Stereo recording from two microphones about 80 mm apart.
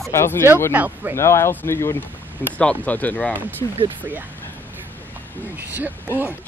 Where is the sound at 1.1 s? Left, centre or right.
Left.